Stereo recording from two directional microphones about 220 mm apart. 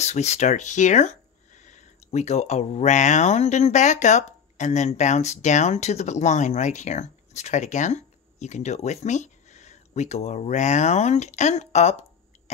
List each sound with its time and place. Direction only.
0.0 s speech: 30° left (ahead or behind)